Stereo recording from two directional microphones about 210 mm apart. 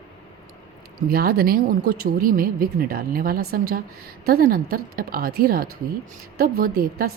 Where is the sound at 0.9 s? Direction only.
45° right (ahead or behind).